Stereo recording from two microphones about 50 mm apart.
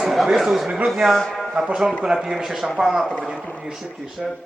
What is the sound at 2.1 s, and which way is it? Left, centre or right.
Speech, centre.